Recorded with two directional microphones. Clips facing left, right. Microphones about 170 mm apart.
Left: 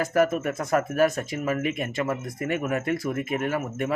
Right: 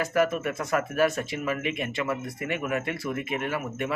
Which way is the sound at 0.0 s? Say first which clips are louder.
Left 2 dB; 40° left (ahead or behind).